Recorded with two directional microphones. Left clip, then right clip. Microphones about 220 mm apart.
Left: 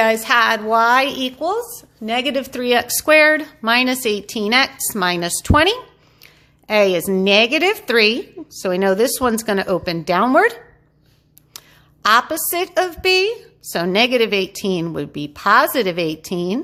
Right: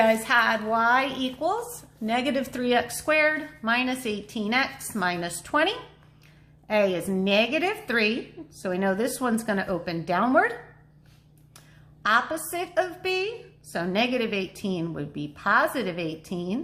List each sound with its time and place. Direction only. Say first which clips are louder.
0.0 s a woman's voice: left 6 dB; 40° left (ahead or behind)
11.5 s a sound: left 14 dB; 45° left (ahead or behind)
12.0 s a woman's voice: left 8 dB; 45° left (ahead or behind)